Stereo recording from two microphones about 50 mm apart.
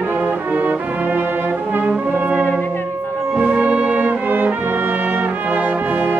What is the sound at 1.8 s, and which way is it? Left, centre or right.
Brass instrument, right.